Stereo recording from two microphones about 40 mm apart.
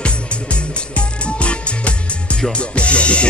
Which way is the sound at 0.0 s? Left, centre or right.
Left.